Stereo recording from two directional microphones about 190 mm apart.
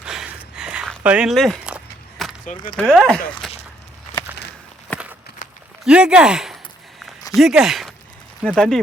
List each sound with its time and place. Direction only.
0.0 s a sound: 5° right (ahead or behind)
0.5 s walk: 5° right (ahead or behind)
2.7 s speech: centre (ahead or behind)
3.4 s walk: centre (ahead or behind)
4.9 s walk: 10° left (ahead or behind)
5.4 s a sound: 45° left (ahead or behind)
5.8 s speech: 5° right (ahead or behind)